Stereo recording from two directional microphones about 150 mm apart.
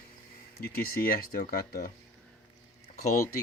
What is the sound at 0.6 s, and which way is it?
Speech, 85° left.